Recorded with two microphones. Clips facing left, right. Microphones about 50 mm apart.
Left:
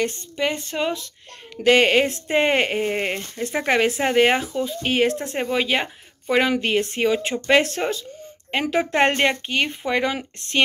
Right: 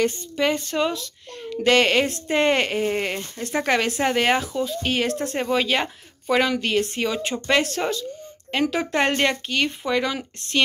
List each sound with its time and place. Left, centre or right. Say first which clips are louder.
0.0 s speech: right 2 dB; centre; by 10.6 s left